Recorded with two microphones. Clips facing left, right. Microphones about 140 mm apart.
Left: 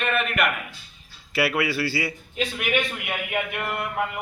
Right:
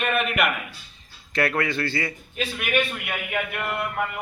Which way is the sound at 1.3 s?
5° left (ahead or behind).